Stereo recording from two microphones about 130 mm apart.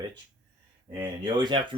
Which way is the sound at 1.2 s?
35° right (ahead or behind).